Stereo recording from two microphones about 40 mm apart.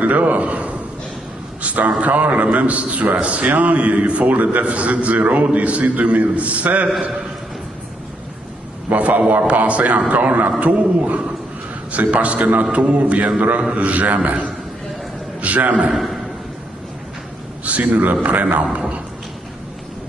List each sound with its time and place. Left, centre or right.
0.0 s a man's voice: right
8.9 s a man's voice: right
15.4 s a sound: right
15.9 s a man's voice: centre
17.6 s a man's voice: right
18.6 s a man's voice: right